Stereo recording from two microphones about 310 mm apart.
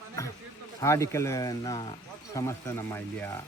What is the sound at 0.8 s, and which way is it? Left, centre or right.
Speech, centre.